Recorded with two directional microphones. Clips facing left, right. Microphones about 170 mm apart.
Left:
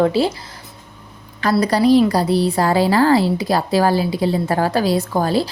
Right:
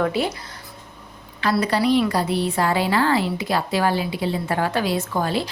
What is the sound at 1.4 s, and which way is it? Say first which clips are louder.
A woman's voice: left 4 dB; 40° left (ahead or behind).